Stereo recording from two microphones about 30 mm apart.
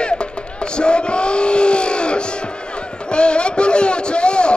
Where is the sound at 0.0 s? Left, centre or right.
Left.